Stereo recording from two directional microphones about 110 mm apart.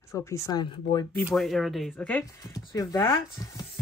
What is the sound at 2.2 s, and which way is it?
Speech, 30° left (ahead or behind).